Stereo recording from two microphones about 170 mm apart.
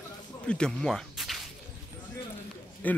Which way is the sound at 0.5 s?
5° left (ahead or behind).